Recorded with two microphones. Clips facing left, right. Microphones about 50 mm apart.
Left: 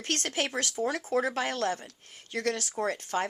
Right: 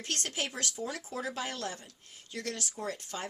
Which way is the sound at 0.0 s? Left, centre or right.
Left.